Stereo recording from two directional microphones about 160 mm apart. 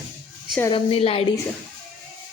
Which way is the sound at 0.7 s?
35° left (ahead or behind).